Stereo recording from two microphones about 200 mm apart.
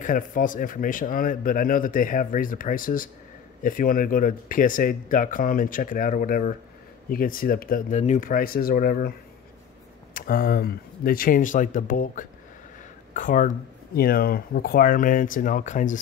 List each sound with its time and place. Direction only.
0.0 s speech: 45° left (ahead or behind)
10.1 s speech: 45° left (ahead or behind)